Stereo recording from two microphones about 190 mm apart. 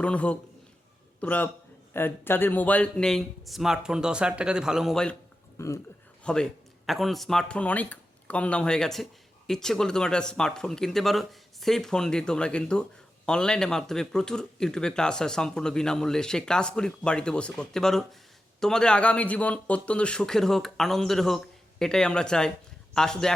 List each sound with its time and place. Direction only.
0.0 s a man's voice: 5° left (ahead or behind)
5.5 s speech: 15° left (ahead or behind)
6.2 s a man's voice: 5° left (ahead or behind)